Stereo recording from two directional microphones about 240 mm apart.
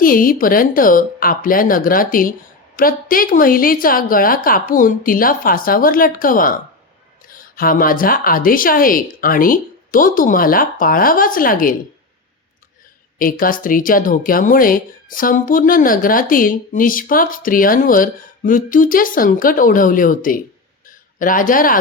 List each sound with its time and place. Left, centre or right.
0.0 s a woman's voice: left
13.1 s a woman's voice: left
20.8 s a sound: left